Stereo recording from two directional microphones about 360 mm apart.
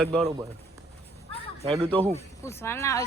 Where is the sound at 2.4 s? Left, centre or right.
Centre.